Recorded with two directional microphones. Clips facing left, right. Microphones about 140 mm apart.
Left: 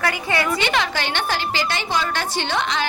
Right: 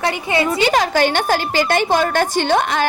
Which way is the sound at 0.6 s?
45° right (ahead or behind).